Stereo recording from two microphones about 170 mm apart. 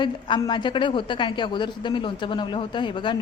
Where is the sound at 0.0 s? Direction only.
25° left (ahead or behind).